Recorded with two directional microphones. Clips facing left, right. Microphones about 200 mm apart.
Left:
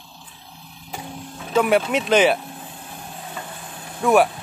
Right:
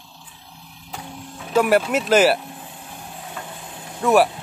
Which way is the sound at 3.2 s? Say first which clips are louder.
Even; 5° right (ahead or behind).